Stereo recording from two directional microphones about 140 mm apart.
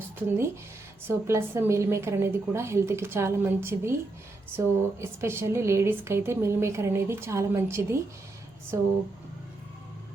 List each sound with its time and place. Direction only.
1.0 s speech: 15° right (ahead or behind)